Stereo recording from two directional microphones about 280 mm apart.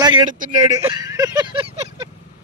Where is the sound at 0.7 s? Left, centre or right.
Centre.